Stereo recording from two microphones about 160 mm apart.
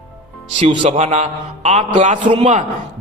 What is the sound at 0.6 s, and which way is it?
A man's voice, 35° right (ahead or behind).